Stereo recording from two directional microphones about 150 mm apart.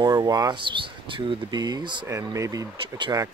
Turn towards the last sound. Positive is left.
turn(degrees=-25)  # may be behind; listen again after turning